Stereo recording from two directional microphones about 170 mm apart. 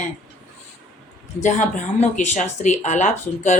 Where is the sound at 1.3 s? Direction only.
45° left (ahead or behind).